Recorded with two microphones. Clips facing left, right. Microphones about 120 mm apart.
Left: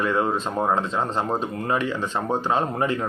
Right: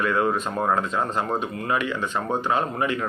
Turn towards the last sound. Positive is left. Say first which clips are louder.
# left 1 dB
turn(degrees=35)  # may be behind; listen again after turning